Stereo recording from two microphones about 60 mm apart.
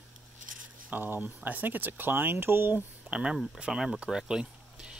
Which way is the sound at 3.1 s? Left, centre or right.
Centre.